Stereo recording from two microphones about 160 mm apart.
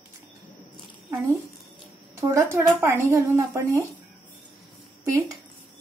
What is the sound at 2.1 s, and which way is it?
Speech, 15° right (ahead or behind).